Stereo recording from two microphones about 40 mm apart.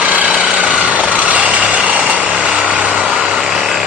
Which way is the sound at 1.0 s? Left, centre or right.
Right.